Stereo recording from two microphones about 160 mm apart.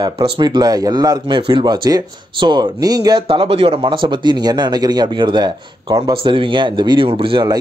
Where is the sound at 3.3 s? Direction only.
35° right (ahead or behind).